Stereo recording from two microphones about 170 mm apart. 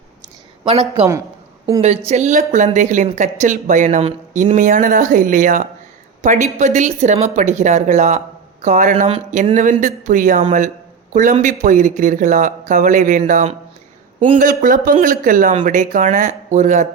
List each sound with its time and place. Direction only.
0.7 s speech: 35° right (ahead or behind)
2.0 s a man's voice: 40° right (ahead or behind)